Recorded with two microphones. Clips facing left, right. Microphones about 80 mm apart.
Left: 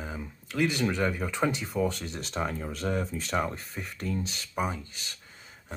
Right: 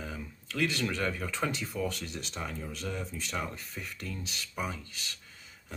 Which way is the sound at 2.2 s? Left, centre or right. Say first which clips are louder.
Left 10 dB; left.